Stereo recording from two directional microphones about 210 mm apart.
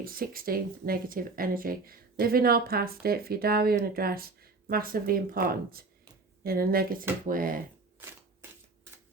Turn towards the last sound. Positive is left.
turn(degrees=-40)  # may be behind; listen again after turning